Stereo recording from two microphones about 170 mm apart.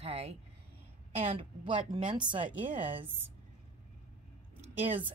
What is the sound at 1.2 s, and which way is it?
Speech, 35° right (ahead or behind).